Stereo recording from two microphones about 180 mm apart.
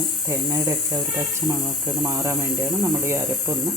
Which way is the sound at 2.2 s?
15° right (ahead or behind).